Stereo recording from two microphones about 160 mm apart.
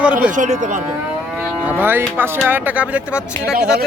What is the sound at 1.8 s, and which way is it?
Speech, 10° right (ahead or behind).